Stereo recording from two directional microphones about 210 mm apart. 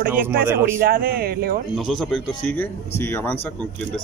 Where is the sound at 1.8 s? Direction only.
Centre (ahead or behind).